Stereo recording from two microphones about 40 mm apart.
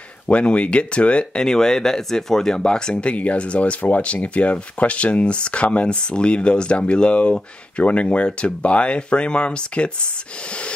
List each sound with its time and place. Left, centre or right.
0.3 s speech: left
1.4 s speech: centre
3.0 s speech: left